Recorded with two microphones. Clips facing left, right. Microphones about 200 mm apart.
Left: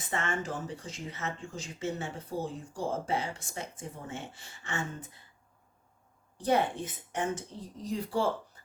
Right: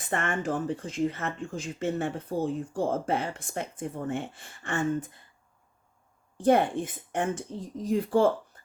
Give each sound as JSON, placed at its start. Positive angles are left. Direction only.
{"t": 0.0, "sound": "speech", "side_deg": -55}
{"t": 6.3, "sound": "a woman's voice", "side_deg": -55}
{"t": 8.5, "sound": "a sound", "side_deg": -50}